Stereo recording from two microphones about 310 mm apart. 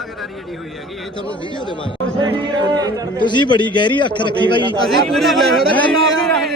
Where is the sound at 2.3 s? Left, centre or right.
Centre.